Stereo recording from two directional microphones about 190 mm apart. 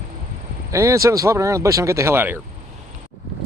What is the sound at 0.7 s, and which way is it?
Speech, 15° right (ahead or behind).